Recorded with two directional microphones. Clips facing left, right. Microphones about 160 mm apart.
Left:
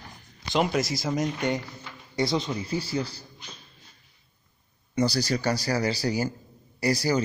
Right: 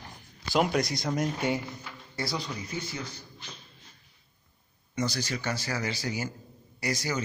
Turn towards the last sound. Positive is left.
turn(degrees=35)  # may be behind; listen again after turning